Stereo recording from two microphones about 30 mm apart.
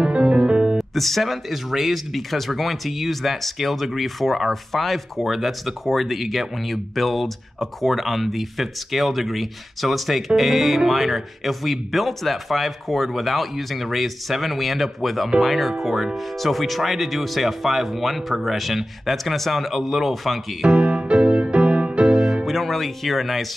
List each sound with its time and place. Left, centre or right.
0.0 s music: right
0.7 s speech: centre
20.7 s music: right
22.1 s music: centre
22.5 s speech: centre